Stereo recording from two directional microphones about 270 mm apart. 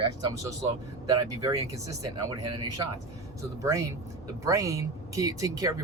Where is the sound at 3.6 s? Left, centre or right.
Centre.